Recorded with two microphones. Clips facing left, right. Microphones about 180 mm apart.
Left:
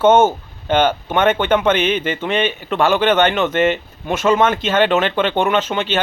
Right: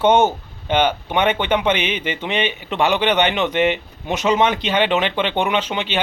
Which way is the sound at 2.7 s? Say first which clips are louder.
Left 3 dB; 15° right (ahead or behind).